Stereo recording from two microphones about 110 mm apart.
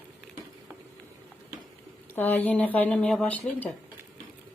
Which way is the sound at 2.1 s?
15° left (ahead or behind).